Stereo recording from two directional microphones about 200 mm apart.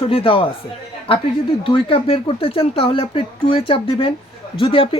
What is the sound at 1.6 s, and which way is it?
Speech, 25° left (ahead or behind).